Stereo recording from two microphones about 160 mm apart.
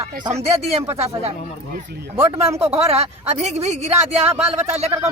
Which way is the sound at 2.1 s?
15° right (ahead or behind).